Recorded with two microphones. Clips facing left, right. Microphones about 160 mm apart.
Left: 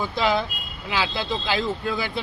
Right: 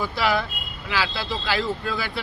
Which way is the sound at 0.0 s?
20° left (ahead or behind).